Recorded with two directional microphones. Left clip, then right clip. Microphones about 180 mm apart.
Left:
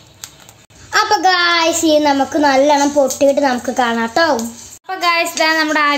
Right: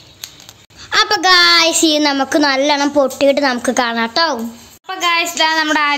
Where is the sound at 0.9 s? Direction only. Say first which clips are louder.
Right 1 dB; 10° right (ahead or behind).